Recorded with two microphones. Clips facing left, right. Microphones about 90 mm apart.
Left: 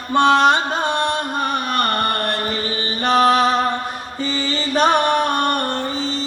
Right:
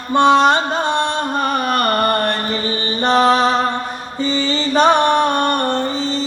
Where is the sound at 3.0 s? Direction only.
30° right (ahead or behind).